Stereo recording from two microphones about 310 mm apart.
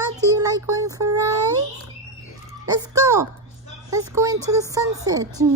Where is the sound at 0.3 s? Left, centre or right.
Centre.